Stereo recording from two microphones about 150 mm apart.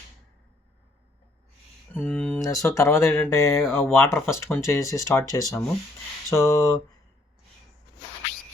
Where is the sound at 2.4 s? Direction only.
20° left (ahead or behind).